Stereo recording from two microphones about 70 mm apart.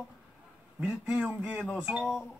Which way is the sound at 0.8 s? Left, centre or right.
Centre.